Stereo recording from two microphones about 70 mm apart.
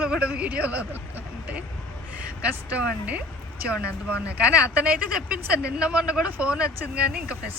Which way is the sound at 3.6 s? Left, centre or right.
Centre.